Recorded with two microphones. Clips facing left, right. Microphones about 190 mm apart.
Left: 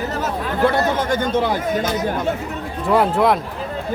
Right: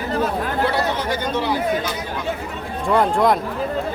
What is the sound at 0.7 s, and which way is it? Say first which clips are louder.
Speech: left 3 dB; 50° left (ahead or behind).